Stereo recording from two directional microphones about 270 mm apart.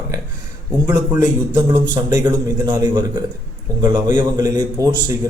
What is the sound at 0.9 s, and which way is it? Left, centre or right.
A man's voice, centre.